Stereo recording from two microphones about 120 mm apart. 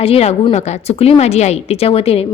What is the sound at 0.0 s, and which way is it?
A woman's voice, 55° left (ahead or behind).